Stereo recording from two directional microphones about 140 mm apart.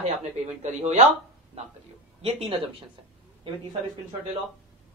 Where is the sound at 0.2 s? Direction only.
55° right (ahead or behind).